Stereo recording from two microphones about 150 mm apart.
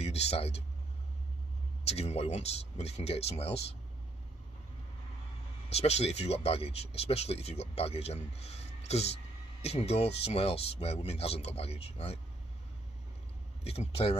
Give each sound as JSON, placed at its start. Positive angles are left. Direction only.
{"t": 0.0, "sound": "speech", "side_deg": 45}
{"t": 1.9, "sound": "speech", "side_deg": 45}
{"t": 5.7, "sound": "speech", "side_deg": 45}
{"t": 13.7, "sound": "speech", "side_deg": 40}